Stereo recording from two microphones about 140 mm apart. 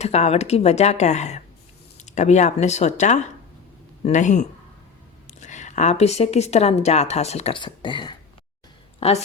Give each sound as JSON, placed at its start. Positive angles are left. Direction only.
{"t": 0.0, "sound": "a woman's voice", "side_deg": 50}
{"t": 9.0, "sound": "a woman's voice", "side_deg": 45}